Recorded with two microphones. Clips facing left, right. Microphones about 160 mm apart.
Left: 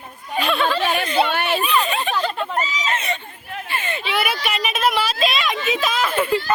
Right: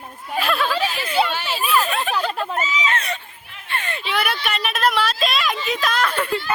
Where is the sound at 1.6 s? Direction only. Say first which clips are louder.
Even; centre (ahead or behind).